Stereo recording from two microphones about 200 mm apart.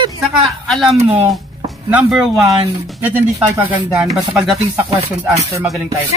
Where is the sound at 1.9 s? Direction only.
5° right (ahead or behind).